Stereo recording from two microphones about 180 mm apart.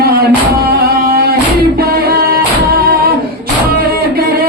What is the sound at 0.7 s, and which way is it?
Music, 55° right (ahead or behind).